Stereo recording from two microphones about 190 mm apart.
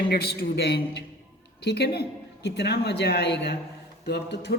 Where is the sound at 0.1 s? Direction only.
55° left (ahead or behind).